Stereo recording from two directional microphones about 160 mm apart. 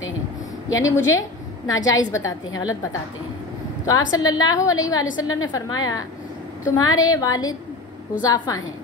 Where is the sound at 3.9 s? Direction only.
20° left (ahead or behind).